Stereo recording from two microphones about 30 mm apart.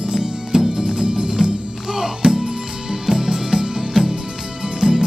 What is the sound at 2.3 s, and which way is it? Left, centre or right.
Music, centre.